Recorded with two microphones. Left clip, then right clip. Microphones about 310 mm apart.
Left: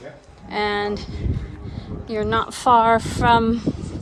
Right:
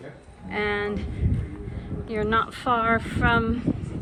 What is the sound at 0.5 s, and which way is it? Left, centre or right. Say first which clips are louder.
Speech: left 4 dB; centre.